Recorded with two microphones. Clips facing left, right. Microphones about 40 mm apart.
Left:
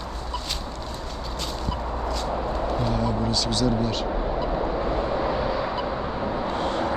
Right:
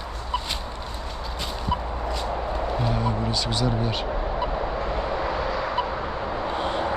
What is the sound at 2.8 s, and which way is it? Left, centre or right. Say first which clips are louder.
Music: left 1 dB; centre.